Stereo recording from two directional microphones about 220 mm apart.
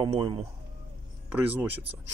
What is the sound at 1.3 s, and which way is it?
Speech, 5° right (ahead or behind).